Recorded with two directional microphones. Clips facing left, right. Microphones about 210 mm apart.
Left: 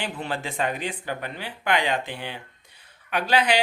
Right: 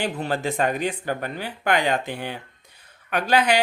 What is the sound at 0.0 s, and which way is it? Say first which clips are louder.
Speech: right 5 dB; 40° right (ahead or behind).